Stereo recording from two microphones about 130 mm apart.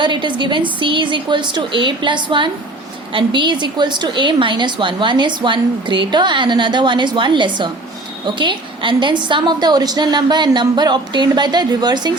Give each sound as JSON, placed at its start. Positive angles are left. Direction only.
{"t": 0.0, "sound": "a woman's voice", "side_deg": -40}